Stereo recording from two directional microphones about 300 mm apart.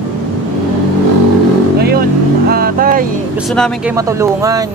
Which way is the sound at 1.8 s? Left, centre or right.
Right.